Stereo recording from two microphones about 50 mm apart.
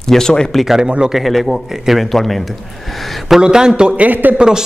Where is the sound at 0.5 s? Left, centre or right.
Centre.